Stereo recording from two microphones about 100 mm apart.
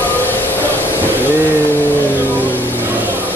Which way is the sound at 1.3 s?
20° left (ahead or behind).